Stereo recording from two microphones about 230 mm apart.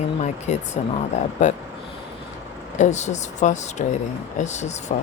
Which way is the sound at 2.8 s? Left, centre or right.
Left.